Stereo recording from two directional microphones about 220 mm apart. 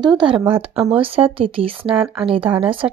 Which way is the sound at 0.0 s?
20° right (ahead or behind).